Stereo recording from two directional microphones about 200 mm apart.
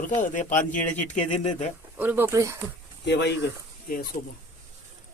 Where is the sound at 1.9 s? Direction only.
10° right (ahead or behind).